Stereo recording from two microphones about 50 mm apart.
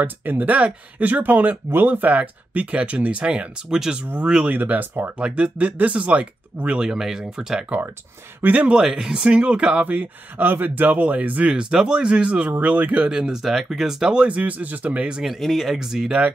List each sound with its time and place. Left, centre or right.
0.0 s speech: right; by 3.9 s centre
4.5 s speech: right
5.2 s speech: right
6.8 s speech: centre
8.5 s speech: right
8.7 s speech: centre
9.8 s speech: right
11.5 s speech: centre
12.4 s speech: right
13.0 s speech: centre
13.4 s speech: centre
14.2 s speech: right
15.2 s speech: centre